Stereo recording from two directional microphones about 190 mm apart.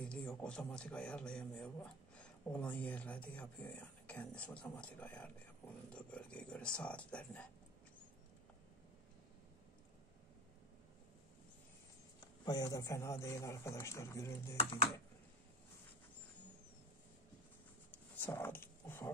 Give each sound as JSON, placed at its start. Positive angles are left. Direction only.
{"t": 0.0, "sound": "a man's voice", "side_deg": 5}
{"t": 12.4, "sound": "a man's voice", "side_deg": 20}
{"t": 17.9, "sound": "a sound", "side_deg": 10}